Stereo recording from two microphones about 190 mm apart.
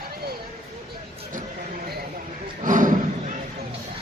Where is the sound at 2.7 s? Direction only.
45° right (ahead or behind).